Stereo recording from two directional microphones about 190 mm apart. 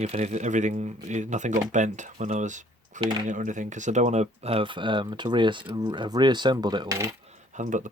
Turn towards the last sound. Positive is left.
turn(degrees=-40)  # may be behind; listen again after turning